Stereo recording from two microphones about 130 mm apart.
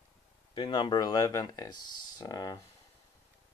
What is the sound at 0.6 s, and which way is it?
Speech, 40° left (ahead or behind).